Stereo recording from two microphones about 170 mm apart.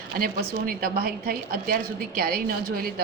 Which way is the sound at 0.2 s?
60° right (ahead or behind).